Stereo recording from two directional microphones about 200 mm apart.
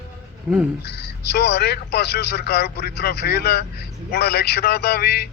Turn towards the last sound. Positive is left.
turn(degrees=55)  # may be behind; listen again after turning